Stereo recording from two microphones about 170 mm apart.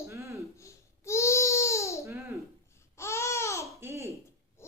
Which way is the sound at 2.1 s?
15° right (ahead or behind).